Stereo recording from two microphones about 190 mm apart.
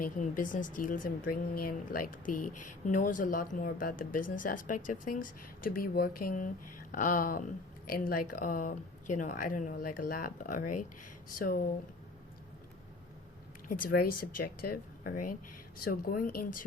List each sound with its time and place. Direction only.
0.0 s speech: 45° left (ahead or behind)
13.7 s speech: 50° left (ahead or behind)